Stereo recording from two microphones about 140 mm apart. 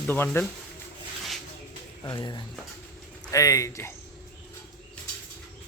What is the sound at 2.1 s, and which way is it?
A man's voice, 30° left (ahead or behind).